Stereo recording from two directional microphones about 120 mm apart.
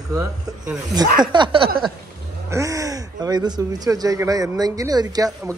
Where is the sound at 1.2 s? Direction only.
40° right (ahead or behind).